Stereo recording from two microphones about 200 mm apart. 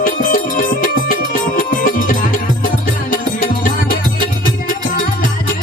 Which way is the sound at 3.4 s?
45° left (ahead or behind).